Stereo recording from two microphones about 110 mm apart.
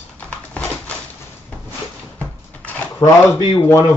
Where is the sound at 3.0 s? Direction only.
35° left (ahead or behind).